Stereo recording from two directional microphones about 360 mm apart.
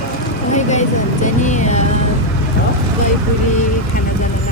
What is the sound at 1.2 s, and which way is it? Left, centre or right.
Vehicle, centre.